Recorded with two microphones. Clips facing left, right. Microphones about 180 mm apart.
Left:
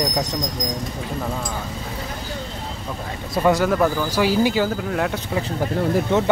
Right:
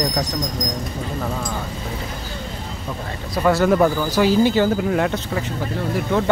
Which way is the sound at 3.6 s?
5° right (ahead or behind).